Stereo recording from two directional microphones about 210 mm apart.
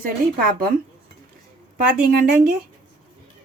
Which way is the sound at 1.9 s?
45° right (ahead or behind).